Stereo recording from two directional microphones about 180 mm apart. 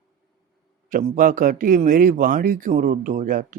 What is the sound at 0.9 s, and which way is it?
Speech, 50° right (ahead or behind).